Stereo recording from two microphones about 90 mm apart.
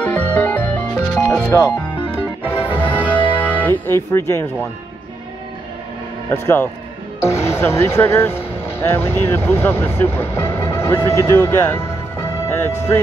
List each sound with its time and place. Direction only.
0.0 s music: 15° left (ahead or behind)
1.5 s speech: 35° left (ahead or behind)
2.4 s music: 25° left (ahead or behind)
6.3 s speech: 25° left (ahead or behind)